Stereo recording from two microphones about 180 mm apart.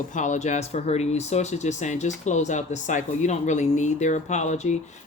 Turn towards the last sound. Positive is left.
turn(degrees=40)  # may be behind; listen again after turning